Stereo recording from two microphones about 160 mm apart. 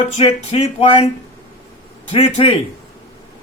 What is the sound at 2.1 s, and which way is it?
Speech, 35° left (ahead or behind).